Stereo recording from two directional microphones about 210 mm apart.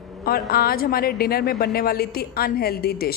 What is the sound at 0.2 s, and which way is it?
A woman's voice, 45° left (ahead or behind).